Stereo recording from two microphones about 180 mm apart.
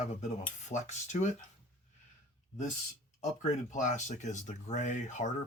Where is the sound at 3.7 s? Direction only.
40° left (ahead or behind).